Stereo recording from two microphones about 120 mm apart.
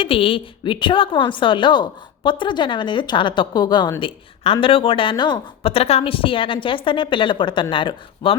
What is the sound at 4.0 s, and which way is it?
Speech, 50° left (ahead or behind).